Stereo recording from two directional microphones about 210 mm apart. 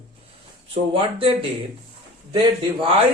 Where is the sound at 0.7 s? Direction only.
25° right (ahead or behind).